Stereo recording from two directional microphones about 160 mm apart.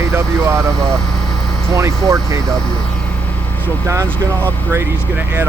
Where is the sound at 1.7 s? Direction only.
20° right (ahead or behind).